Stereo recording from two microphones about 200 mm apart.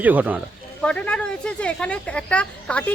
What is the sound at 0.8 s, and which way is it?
Speech, 5° left (ahead or behind).